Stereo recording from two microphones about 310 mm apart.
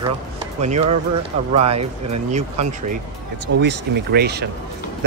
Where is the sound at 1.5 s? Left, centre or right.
Centre.